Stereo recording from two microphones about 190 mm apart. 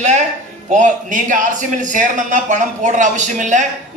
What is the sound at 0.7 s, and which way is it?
Speech, 40° right (ahead or behind).